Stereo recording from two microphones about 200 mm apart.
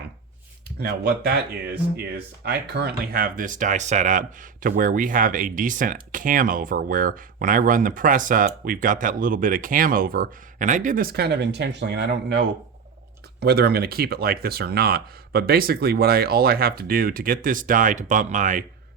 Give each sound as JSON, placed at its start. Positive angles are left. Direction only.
{"t": 0.8, "sound": "speech", "side_deg": -50}